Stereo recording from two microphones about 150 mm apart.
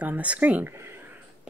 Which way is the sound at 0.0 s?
10° right (ahead or behind).